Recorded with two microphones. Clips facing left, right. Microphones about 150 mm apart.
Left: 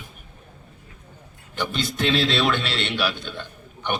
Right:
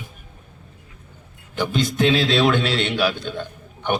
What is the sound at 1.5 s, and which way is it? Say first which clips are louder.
A man's voice: right 6 dB; 45° right (ahead or behind).